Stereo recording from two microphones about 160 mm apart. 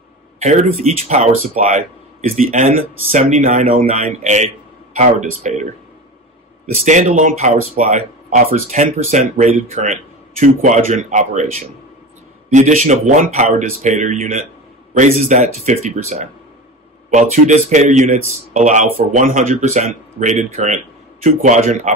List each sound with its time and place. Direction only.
0.4 s speech: 45° right (ahead or behind)